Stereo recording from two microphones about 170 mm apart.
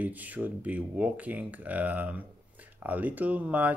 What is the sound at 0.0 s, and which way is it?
Speech, 10° right (ahead or behind).